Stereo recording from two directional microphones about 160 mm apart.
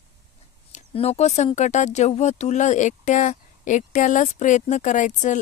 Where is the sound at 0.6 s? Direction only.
45° left (ahead or behind).